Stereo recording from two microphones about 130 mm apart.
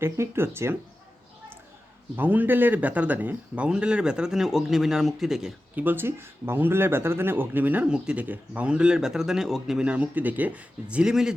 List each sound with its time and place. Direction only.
0.0 s speech: 20° right (ahead or behind)
2.1 s speech: 15° right (ahead or behind)